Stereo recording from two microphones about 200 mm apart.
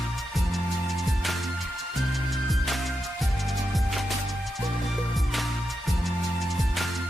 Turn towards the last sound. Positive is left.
turn(degrees=0)  # may be behind; listen again after turning